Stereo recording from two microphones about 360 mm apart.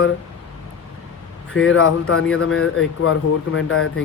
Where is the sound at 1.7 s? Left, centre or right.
Left.